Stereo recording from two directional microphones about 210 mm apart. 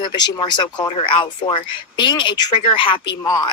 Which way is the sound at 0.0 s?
20° left (ahead or behind).